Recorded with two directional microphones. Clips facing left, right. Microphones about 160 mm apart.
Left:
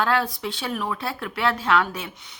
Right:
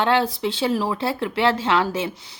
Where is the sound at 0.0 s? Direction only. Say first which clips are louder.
Right 4 dB; 25° right (ahead or behind).